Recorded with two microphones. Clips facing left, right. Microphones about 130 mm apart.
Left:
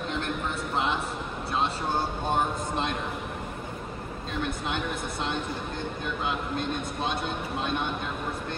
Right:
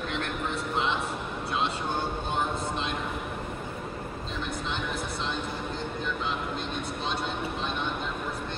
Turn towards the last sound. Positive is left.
turn(degrees=50)  # may be behind; listen again after turning